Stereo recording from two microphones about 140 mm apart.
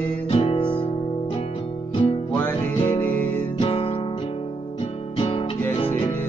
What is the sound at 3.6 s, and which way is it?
Music, 40° left (ahead or behind).